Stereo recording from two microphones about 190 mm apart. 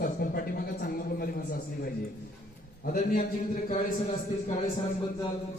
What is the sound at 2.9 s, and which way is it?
Speech, 45° left (ahead or behind).